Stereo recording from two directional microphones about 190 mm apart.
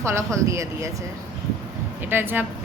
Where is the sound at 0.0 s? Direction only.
15° right (ahead or behind).